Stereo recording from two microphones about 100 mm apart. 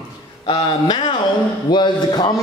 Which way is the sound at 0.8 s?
55° left (ahead or behind).